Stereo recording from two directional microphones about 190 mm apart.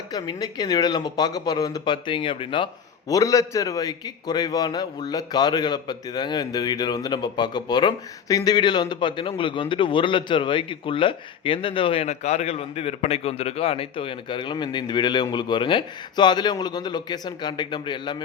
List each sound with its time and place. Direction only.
0.1 s a man's voice: 20° left (ahead or behind)